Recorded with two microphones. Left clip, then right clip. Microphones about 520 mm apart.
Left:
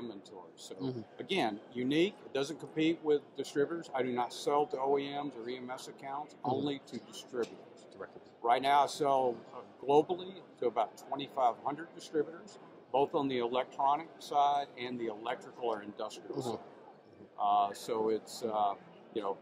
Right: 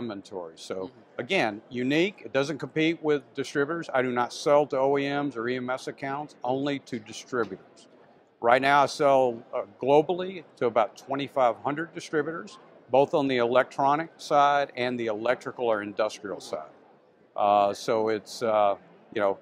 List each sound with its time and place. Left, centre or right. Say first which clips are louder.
0.1 s speech: right 12 dB; right
8.4 s speech: right 7 dB; right